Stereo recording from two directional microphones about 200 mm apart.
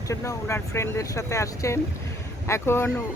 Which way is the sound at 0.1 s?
15° left (ahead or behind).